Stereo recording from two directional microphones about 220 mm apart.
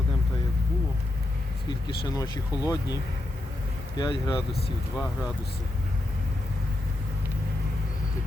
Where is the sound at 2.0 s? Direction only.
15° left (ahead or behind).